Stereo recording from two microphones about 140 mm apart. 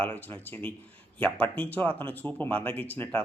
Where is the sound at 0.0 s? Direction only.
10° left (ahead or behind).